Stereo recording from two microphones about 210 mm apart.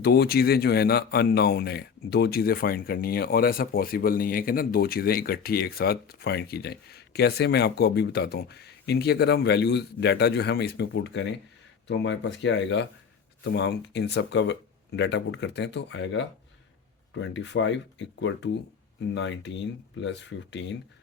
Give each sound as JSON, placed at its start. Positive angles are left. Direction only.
{"t": 0.0, "sound": "speech", "side_deg": 50}